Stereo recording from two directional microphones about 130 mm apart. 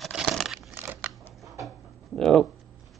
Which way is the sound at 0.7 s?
15° right (ahead or behind).